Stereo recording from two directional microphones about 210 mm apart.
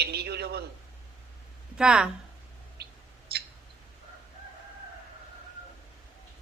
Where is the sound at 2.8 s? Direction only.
50° right (ahead or behind).